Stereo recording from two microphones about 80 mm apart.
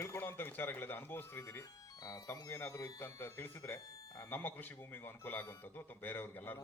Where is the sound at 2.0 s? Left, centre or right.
Left.